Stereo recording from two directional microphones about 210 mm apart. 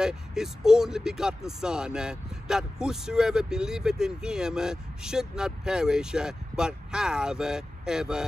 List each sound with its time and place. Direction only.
0.0 s speech: 5° right (ahead or behind)